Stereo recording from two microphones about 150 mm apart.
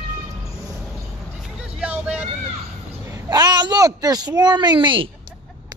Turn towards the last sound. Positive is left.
turn(degrees=-35)  # may be behind; listen again after turning